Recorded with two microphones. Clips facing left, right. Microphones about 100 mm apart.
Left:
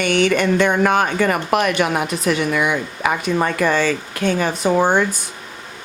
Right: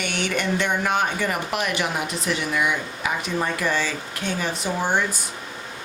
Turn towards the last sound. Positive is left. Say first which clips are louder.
# left 8 dB
turn(degrees=60)  # may be behind; listen again after turning